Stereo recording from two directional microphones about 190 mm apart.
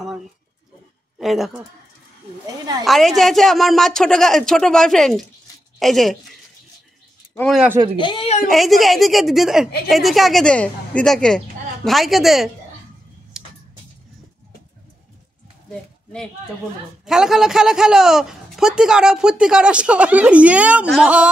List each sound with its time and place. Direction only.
1.1 s a woman's voice: centre (ahead or behind)
2.8 s a man's voice: centre (ahead or behind)
7.3 s a man's voice: 5° left (ahead or behind)
8.0 s speech: 25° left (ahead or behind)
8.5 s a man's voice: centre (ahead or behind)
13.4 s tick-tock: 5° right (ahead or behind)
15.7 s a man's voice: 5° left (ahead or behind)